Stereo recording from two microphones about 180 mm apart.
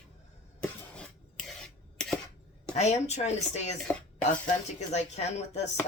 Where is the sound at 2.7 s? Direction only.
40° left (ahead or behind).